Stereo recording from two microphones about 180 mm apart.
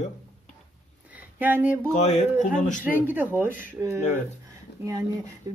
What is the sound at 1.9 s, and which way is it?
Speech, 40° left (ahead or behind).